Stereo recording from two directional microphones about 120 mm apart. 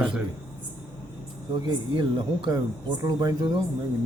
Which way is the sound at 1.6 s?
40° right (ahead or behind).